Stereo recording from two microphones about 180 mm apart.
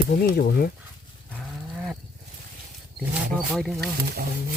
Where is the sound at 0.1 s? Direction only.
55° left (ahead or behind).